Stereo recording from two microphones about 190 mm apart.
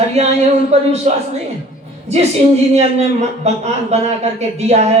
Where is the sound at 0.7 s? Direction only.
35° right (ahead or behind).